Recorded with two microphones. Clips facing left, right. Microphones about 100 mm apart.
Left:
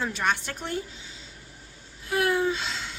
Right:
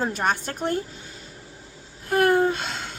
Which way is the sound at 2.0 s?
50° right (ahead or behind).